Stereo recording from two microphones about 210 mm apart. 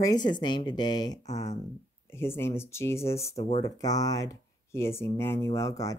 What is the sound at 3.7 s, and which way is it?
Speech, 15° left (ahead or behind).